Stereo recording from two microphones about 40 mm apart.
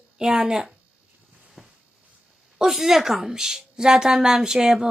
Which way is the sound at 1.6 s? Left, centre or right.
Centre.